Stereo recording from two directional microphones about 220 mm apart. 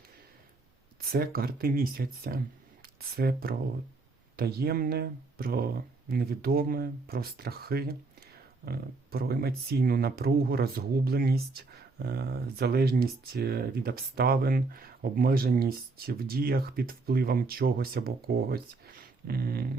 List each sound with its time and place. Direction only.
1.0 s speech: 45° right (ahead or behind)